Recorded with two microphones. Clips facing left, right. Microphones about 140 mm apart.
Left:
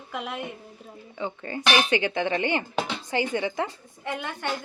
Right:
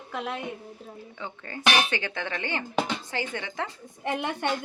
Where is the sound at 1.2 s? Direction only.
15° left (ahead or behind).